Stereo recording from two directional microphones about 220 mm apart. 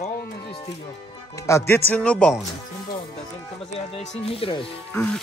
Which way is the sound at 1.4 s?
15° left (ahead or behind).